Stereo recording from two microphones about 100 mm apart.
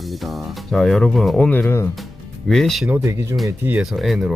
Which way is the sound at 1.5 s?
20° left (ahead or behind).